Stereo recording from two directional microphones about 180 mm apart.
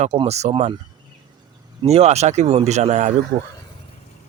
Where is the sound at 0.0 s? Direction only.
35° right (ahead or behind).